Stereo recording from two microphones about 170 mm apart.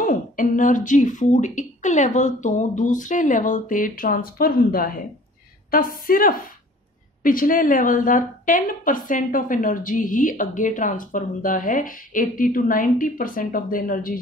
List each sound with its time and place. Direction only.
0.0 s a woman's voice: 50° left (ahead or behind)